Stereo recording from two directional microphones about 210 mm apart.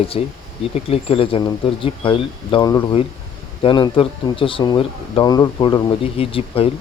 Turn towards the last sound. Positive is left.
turn(degrees=25)  # may be behind; listen again after turning